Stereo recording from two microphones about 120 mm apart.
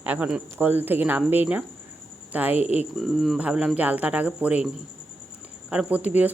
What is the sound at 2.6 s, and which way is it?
Speech, 65° left (ahead or behind).